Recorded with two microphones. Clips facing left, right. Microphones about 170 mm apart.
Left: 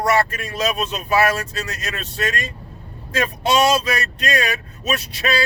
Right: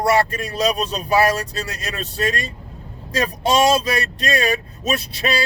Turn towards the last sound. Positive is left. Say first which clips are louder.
# right 1 dB
turn(degrees=-35)  # may be behind; listen again after turning